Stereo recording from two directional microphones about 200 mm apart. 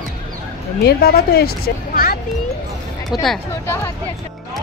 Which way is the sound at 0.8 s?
50° left (ahead or behind).